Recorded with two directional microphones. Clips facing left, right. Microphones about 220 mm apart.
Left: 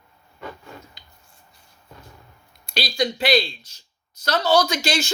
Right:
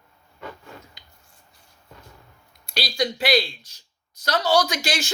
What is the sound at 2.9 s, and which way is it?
Speech, 10° right (ahead or behind).